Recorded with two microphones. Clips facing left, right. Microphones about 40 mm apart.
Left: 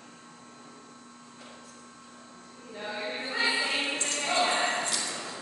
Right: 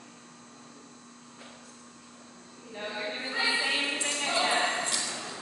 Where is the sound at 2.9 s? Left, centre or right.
Centre.